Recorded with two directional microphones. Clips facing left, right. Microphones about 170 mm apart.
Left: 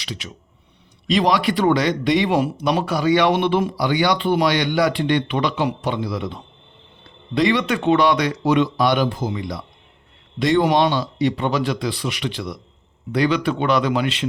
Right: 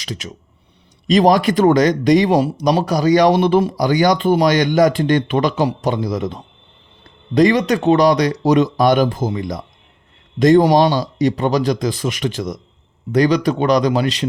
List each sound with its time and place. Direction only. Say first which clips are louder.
0.0 s speech: right 4 dB; 45° right (ahead or behind)